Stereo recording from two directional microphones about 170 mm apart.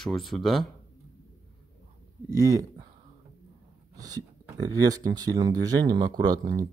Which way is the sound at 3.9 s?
20° right (ahead or behind).